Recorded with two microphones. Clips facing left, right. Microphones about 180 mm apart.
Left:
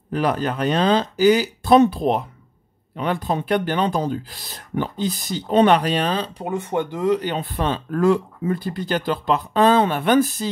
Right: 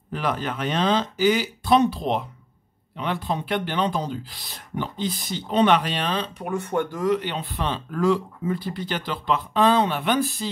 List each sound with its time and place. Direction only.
0.1 s speech: 40° left (ahead or behind)
6.4 s speech: 20° left (ahead or behind)
7.2 s speech: 40° left (ahead or behind)